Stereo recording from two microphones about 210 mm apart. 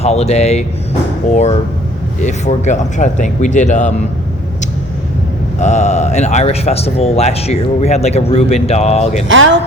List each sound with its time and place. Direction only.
0.0 s speech: 30° left (ahead or behind)
5.5 s speech: 35° left (ahead or behind)
9.3 s speech: 65° right (ahead or behind)